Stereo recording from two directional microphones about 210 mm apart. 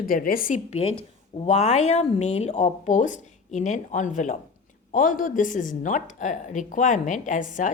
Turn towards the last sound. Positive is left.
turn(degrees=35)  # may be behind; listen again after turning